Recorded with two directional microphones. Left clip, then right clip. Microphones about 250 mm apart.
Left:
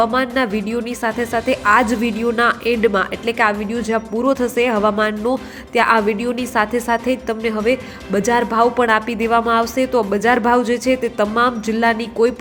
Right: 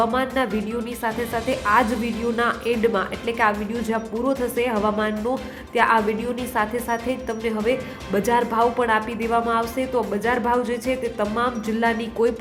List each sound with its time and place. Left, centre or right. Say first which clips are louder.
0.0 s a woman's voice: left 5 dB; centre